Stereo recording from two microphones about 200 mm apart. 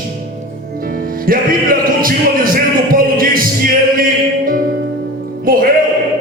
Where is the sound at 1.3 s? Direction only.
45° right (ahead or behind).